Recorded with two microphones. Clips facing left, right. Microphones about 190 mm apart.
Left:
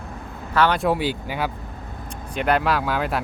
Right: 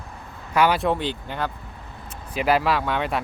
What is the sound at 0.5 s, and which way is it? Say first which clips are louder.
Speech: even; 10° right (ahead or behind).